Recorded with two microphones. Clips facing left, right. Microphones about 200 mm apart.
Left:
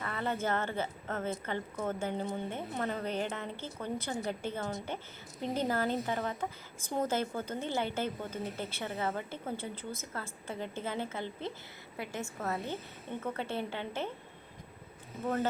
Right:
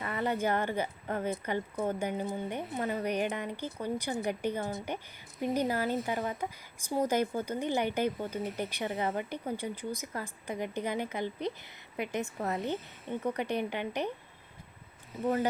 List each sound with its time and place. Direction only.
0.0 s a woman's voice: 15° right (ahead or behind)